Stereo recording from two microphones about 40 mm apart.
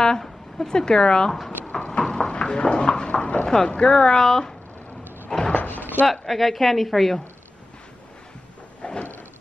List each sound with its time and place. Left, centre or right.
0.2 s a woman's voice: centre
1.7 s a sound: left
2.3 s speech: left
5.5 s door: left
6.2 s a woman's voice: centre
8.8 s a sound: left